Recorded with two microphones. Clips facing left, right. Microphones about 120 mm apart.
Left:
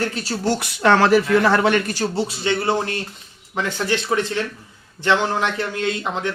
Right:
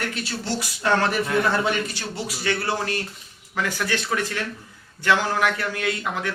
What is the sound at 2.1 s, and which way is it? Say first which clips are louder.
Speech: left 1 dB; 25° left (ahead or behind).